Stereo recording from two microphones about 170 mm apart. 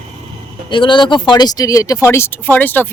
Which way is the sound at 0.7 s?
30° left (ahead or behind).